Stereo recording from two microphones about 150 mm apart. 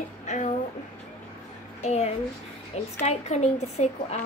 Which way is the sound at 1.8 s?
45° left (ahead or behind).